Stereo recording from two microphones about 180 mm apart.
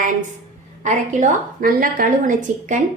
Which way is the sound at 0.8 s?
40° right (ahead or behind).